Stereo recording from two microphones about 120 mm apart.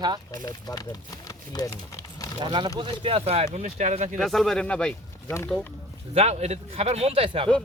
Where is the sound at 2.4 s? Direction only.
35° right (ahead or behind); by 3.4 s 55° right (ahead or behind).